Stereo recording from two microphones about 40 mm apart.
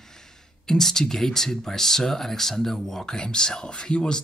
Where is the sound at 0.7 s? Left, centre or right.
Centre.